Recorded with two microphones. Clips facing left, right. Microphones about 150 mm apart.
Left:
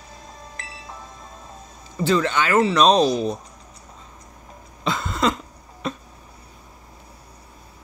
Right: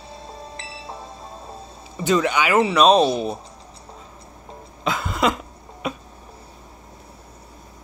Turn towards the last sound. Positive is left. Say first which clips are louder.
# right 1 dB
turn(degrees=-10)  # may be behind; listen again after turning